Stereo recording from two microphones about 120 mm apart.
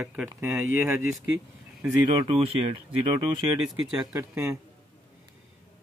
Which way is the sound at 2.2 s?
45° right (ahead or behind).